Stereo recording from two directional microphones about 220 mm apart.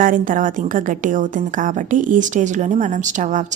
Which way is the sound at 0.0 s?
40° right (ahead or behind).